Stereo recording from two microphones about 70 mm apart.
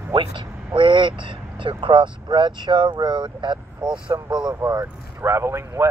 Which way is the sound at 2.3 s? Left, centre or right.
Right.